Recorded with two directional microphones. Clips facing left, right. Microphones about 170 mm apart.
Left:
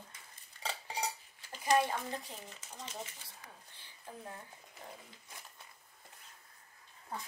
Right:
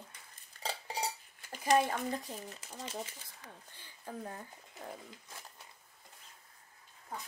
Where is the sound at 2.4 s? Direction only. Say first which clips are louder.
Right 4 dB; 35° right (ahead or behind).